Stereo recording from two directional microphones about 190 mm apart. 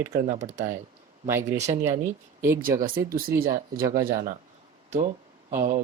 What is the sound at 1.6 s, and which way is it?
Speech, 35° right (ahead or behind).